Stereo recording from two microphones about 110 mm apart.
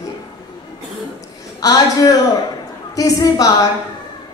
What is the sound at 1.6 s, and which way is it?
Speech, 35° left (ahead or behind).